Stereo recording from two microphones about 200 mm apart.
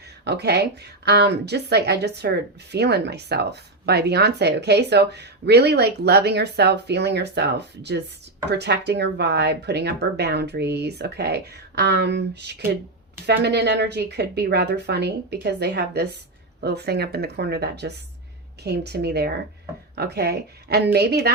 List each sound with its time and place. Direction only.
0.3 s speech: 55° right (ahead or behind)